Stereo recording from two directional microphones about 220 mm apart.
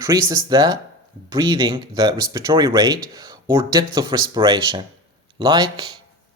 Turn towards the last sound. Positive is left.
turn(degrees=-20)  # may be behind; listen again after turning